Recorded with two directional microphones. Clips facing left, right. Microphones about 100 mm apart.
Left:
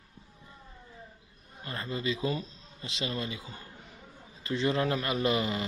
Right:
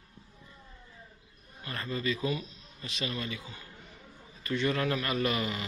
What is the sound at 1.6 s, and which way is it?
A man's voice, 25° left (ahead or behind).